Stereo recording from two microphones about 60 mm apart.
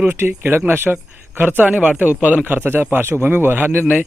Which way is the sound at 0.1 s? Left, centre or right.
Right.